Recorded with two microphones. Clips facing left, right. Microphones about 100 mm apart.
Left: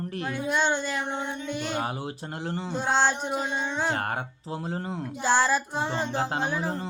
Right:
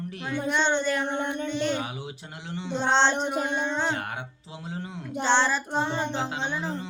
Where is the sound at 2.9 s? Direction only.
5° left (ahead or behind).